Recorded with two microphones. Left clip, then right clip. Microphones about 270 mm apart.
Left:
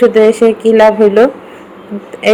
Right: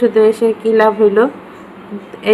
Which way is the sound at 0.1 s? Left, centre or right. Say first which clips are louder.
Left 4 dB; centre.